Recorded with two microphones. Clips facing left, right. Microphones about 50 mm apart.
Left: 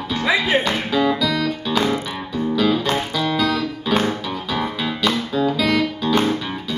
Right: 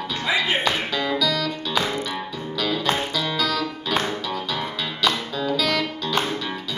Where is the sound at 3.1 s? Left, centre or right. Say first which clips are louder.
Left 4 dB; centre.